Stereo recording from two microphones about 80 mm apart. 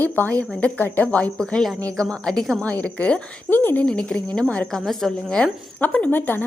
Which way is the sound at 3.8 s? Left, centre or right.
Centre.